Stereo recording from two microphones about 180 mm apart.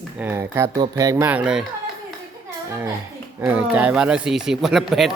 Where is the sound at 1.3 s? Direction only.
5° right (ahead or behind).